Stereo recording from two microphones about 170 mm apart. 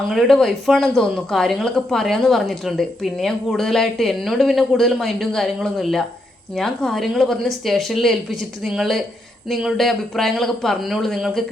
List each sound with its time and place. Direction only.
0.1 s speech: centre (ahead or behind)